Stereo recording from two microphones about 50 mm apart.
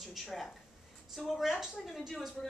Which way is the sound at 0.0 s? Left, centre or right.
Centre.